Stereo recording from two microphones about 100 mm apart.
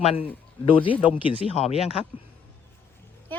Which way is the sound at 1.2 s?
80° left.